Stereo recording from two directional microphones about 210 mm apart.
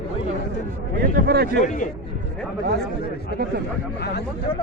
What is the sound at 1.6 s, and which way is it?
Speech, 40° left (ahead or behind).